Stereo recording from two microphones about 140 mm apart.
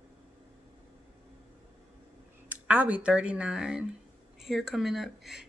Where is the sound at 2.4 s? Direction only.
10° right (ahead or behind).